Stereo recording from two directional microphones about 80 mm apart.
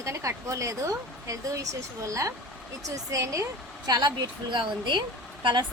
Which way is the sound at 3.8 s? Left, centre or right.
Right.